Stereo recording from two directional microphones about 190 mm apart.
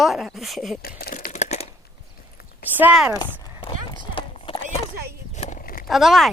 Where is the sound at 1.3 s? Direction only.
35° left (ahead or behind).